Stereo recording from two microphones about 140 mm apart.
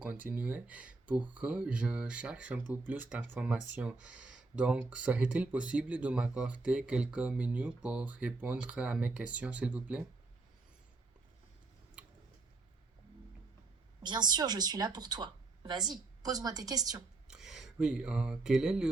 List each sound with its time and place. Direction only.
0.3 s speech: 10° right (ahead or behind)
12.0 s a sound: 10° right (ahead or behind)
14.0 s a woman's voice: 30° right (ahead or behind)
17.2 s speech: 5° right (ahead or behind)